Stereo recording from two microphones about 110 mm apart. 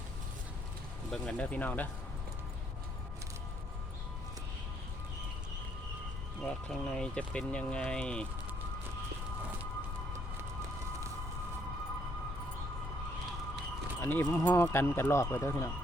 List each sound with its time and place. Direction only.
1.1 s speech: 10° left (ahead or behind)
6.4 s speech: 10° left (ahead or behind)
14.0 s speech: 20° left (ahead or behind)